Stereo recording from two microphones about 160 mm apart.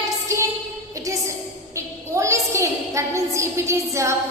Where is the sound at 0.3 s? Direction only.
20° right (ahead or behind).